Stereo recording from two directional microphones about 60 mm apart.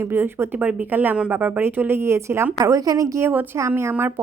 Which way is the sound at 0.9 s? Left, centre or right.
Right.